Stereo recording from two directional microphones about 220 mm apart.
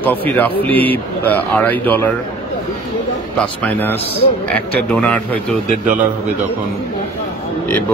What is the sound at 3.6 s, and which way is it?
A man's voice, 10° left (ahead or behind).